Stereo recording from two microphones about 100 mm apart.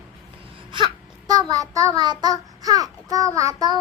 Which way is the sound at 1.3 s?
40° right (ahead or behind).